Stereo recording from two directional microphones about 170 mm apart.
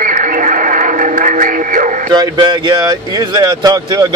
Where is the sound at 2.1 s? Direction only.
25° right (ahead or behind).